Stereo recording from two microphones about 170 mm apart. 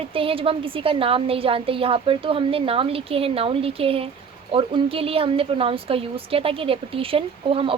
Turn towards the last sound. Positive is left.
turn(degrees=-30)  # may be behind; listen again after turning